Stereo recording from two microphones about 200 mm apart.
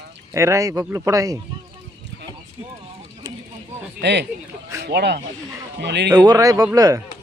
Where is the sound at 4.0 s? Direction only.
60° right (ahead or behind).